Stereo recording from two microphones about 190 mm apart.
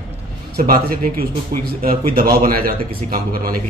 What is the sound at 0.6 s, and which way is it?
Speech, 50° right (ahead or behind).